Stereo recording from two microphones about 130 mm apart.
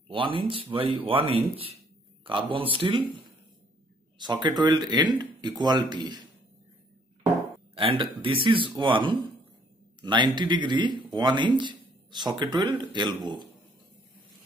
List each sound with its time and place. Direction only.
0.1 s speech: 40° right (ahead or behind)
4.2 s speech: 35° right (ahead or behind)
7.7 s a man's voice: 45° right (ahead or behind)